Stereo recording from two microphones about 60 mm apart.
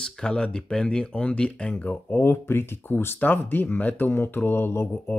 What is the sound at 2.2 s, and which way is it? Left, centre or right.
Speech, left.